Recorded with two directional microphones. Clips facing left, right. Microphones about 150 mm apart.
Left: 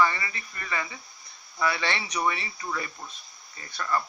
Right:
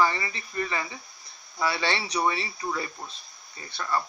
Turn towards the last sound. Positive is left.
turn(degrees=-25)  # may be behind; listen again after turning